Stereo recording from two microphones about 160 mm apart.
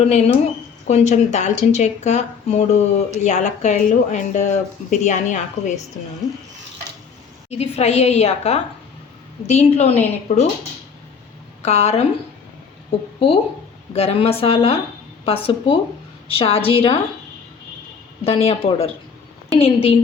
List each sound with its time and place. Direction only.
0.0 s a woman's voice: 40° left (ahead or behind)
7.6 s a woman's voice: 40° left (ahead or behind)
11.6 s speech: 45° left (ahead or behind)
13.1 s a woman's voice: 35° left (ahead or behind)
18.3 s a woman's voice: 40° left (ahead or behind)